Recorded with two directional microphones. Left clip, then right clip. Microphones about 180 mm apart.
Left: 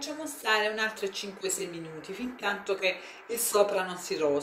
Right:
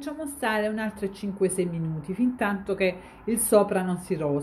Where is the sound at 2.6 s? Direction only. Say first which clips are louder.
Right 3 dB; 45° right (ahead or behind).